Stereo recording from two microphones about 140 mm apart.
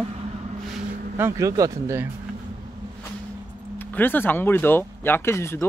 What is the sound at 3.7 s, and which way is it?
Speech, 15° left (ahead or behind).